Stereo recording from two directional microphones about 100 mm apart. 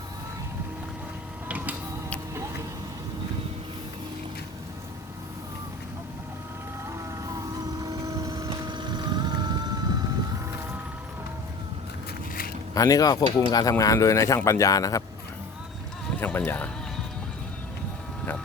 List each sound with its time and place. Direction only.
1.5 s music: 15° right (ahead or behind)
6.8 s vehicle: 35° right (ahead or behind)
12.7 s speech: 35° left (ahead or behind)
16.2 s speech: 20° left (ahead or behind)